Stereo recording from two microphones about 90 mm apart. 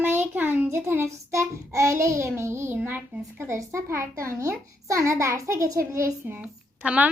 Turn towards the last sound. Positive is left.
turn(degrees=-15)  # may be behind; listen again after turning